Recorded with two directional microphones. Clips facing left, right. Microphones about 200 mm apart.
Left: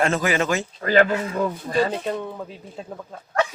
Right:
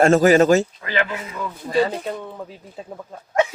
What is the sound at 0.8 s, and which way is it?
Speech, 45° left (ahead or behind).